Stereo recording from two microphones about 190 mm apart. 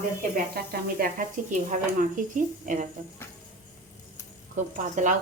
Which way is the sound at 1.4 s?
40° right (ahead or behind).